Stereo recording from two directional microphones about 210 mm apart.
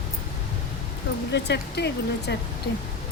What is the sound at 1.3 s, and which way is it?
Speech, 55° left (ahead or behind).